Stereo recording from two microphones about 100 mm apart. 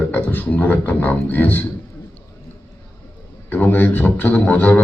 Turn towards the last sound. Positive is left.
turn(degrees=15)  # may be behind; listen again after turning